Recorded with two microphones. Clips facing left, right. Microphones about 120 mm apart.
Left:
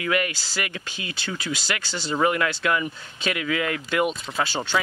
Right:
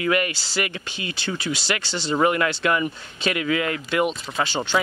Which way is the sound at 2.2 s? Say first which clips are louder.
Right 2 dB; 15° right (ahead or behind).